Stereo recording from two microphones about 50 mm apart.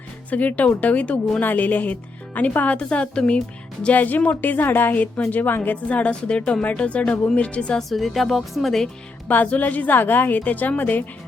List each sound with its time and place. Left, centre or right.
0.3 s a woman's voice: left
3.8 s a woman's voice: left
7.8 s a woman's voice: centre
9.2 s a woman's voice: left